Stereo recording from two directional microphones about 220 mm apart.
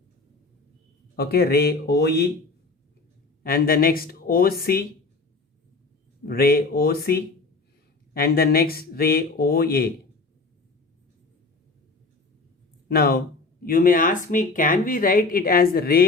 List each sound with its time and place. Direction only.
1.1 s speech: 45° left (ahead or behind)
3.4 s speech: 40° left (ahead or behind)
6.2 s speech: 45° left (ahead or behind)
12.9 s speech: 45° left (ahead or behind)